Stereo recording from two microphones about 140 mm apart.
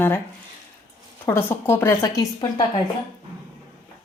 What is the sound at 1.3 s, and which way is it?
Speech, 15° left (ahead or behind).